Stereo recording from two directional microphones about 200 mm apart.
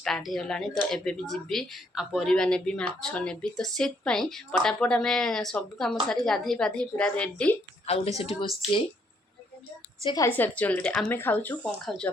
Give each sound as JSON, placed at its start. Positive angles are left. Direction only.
{"t": 0.0, "sound": "speech", "side_deg": 0}
{"t": 8.2, "sound": "speech", "side_deg": 30}
{"t": 10.0, "sound": "speech", "side_deg": 20}
{"t": 10.2, "sound": "speech", "side_deg": 10}